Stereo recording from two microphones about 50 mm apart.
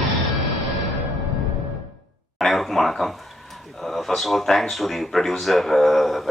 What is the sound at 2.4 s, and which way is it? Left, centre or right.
Speech, centre.